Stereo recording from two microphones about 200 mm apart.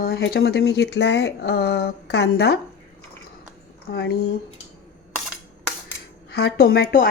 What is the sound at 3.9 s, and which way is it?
Speech, 50° left (ahead or behind).